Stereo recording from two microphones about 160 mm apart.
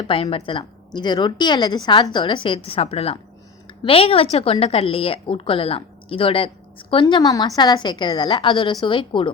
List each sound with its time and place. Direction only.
0.0 s a woman's voice: 35° left (ahead or behind)
0.9 s a woman's voice: 25° left (ahead or behind)